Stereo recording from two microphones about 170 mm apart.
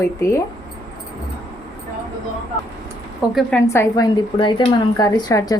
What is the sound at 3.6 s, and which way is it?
A woman's voice, 15° left (ahead or behind).